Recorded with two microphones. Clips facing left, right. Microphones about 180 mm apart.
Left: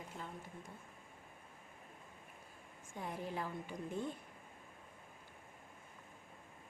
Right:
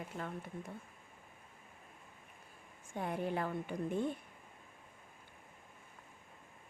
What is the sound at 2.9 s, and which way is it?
A woman's voice, 65° right (ahead or behind).